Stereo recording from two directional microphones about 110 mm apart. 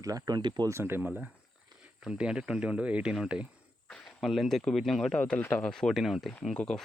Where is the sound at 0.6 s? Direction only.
25° right (ahead or behind); by 3.4 s 5° right (ahead or behind).